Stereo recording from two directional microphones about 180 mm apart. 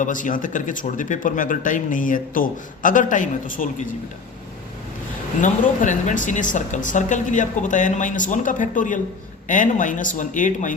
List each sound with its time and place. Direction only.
0.0 s speech: 45° left (ahead or behind)
5.4 s speech: 45° left (ahead or behind)